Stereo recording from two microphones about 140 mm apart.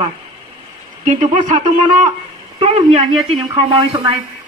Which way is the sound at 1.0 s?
60° right (ahead or behind).